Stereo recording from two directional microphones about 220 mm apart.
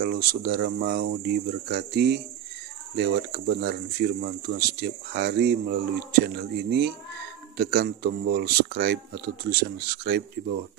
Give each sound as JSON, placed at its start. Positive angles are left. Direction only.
{"t": 0.0, "sound": "speech", "side_deg": -45}